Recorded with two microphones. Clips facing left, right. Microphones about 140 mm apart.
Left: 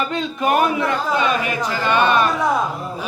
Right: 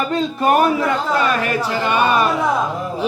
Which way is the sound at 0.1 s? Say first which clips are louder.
Right 3 dB; 40° right (ahead or behind).